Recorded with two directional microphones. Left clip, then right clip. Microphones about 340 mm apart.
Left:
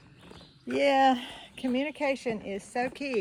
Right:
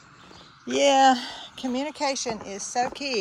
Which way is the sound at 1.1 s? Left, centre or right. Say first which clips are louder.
Right 5 dB; right.